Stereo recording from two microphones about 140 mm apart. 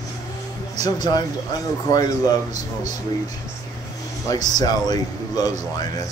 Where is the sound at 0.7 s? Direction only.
30° left (ahead or behind).